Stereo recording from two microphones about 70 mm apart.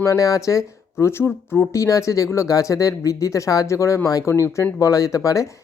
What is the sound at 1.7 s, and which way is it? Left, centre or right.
Speech, left.